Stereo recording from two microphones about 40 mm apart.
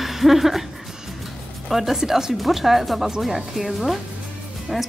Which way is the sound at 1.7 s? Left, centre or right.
Centre.